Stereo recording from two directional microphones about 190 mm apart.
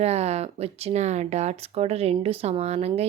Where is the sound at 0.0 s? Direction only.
35° right (ahead or behind).